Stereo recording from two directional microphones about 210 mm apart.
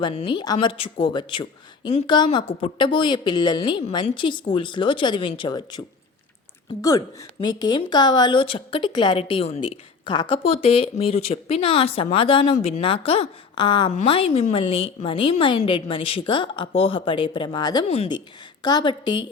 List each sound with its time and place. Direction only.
0.0 s a woman's voice: 25° left (ahead or behind)
7.4 s a woman's voice: 20° left (ahead or behind)